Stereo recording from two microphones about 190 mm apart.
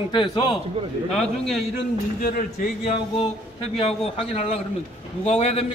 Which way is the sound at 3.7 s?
30° left (ahead or behind).